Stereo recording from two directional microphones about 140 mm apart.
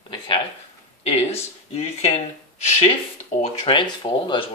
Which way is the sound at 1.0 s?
45° left (ahead or behind).